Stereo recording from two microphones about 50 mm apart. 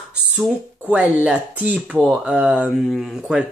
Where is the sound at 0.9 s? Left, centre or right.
Right.